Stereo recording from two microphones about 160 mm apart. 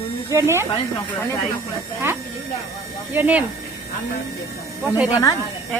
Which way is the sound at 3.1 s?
10° right (ahead or behind).